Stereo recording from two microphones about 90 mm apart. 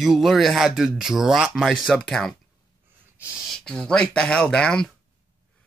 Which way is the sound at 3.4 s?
10° left (ahead or behind).